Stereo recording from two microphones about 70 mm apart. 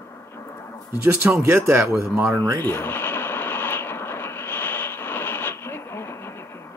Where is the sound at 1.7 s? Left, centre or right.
Right.